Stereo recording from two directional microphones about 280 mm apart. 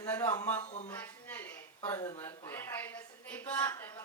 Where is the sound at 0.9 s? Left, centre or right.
Centre.